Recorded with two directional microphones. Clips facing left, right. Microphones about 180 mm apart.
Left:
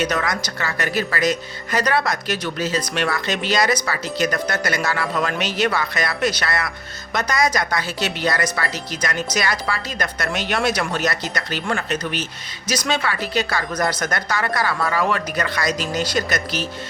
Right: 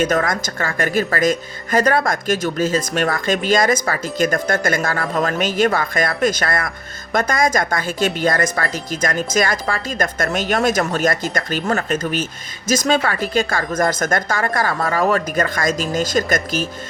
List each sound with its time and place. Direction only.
0.0 s speech: 50° right (ahead or behind)